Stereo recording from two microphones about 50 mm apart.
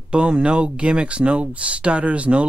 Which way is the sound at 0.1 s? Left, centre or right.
Right.